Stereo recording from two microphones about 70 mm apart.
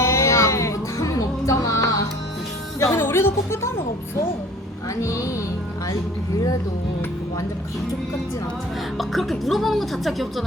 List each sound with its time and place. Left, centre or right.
0.0 s music: left
2.8 s speech: left
5.0 s speech: left
9.0 s speech: centre